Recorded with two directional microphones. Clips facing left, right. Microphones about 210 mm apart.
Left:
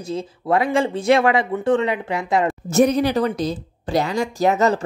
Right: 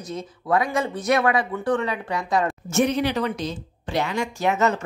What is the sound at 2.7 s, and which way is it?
A woman's voice, 40° left (ahead or behind).